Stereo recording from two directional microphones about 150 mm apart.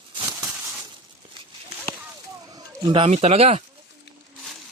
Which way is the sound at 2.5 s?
35° right (ahead or behind).